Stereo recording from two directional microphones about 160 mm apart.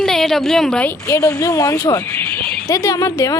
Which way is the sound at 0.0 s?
Centre (ahead or behind).